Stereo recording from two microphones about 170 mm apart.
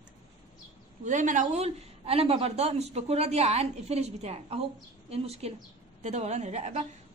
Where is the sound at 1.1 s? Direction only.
50° right (ahead or behind).